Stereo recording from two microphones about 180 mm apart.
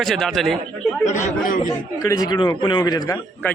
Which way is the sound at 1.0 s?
45° left (ahead or behind).